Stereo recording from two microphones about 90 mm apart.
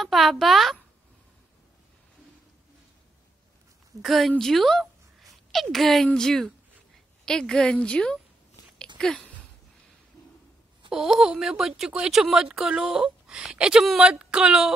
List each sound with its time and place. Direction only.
0.0 s a child's voice: centre (ahead or behind)
4.0 s a child's voice: centre (ahead or behind)
10.9 s a woman's voice: 5° right (ahead or behind)